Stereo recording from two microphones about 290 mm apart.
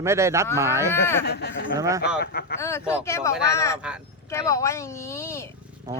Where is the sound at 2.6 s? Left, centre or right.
Centre.